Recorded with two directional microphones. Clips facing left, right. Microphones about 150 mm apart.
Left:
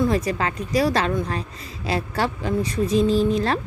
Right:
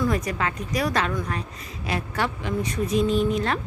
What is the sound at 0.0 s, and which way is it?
Speech, 30° left (ahead or behind).